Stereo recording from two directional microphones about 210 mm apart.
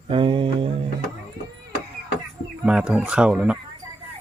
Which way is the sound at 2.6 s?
5° right (ahead or behind).